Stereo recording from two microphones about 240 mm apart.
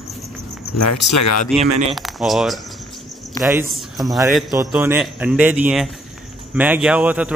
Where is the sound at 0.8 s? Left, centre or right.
Left.